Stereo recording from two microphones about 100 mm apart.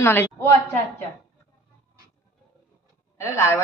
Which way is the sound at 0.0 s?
20° left (ahead or behind).